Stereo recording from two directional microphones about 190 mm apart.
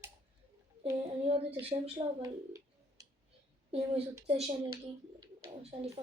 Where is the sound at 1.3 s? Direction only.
30° right (ahead or behind).